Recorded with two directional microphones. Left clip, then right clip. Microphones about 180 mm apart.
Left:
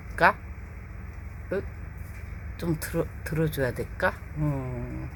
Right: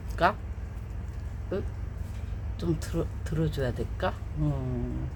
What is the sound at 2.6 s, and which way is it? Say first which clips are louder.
Speech: left 2 dB; 25° left (ahead or behind).